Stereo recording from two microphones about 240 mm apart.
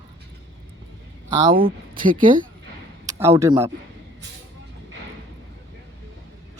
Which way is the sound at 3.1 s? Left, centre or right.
Centre.